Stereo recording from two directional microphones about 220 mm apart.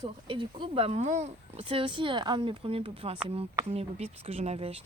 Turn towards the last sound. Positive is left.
turn(degrees=-25)  # may be behind; listen again after turning